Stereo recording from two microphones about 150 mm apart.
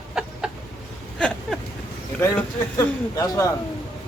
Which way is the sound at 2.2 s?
20° left (ahead or behind).